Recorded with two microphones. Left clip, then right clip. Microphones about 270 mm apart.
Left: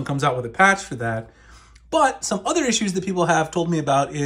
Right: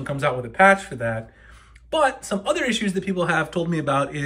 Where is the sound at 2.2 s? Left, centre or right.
Centre.